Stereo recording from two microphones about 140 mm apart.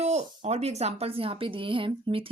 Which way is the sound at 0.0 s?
50° right (ahead or behind).